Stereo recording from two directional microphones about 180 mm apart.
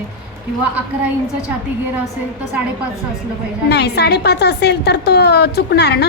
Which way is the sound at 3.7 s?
65° left (ahead or behind).